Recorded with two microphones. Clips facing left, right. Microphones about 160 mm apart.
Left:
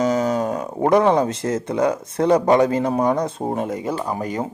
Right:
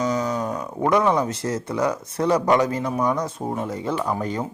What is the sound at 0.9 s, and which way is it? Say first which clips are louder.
Speech: left 4 dB; 50° left (ahead or behind).